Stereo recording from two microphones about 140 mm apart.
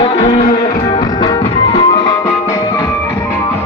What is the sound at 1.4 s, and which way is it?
Music, 40° left (ahead or behind).